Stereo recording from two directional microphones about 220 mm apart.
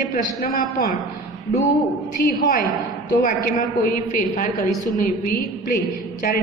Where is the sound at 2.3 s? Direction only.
40° left (ahead or behind).